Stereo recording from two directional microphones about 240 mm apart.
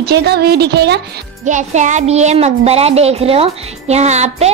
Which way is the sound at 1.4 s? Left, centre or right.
Right.